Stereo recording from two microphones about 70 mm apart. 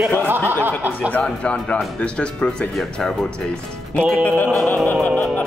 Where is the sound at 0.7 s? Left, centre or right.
Right.